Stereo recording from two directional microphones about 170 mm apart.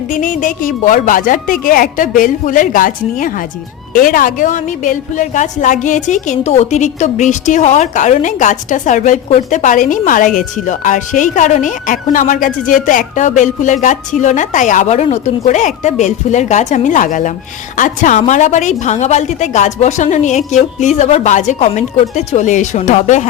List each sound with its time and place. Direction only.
0.1 s a woman's voice: 50° left (ahead or behind)